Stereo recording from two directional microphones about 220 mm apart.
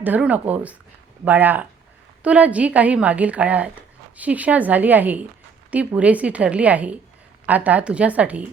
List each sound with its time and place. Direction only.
0.0 s speech: 5° right (ahead or behind)